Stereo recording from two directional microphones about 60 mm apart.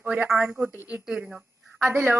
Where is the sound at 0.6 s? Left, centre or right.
Right.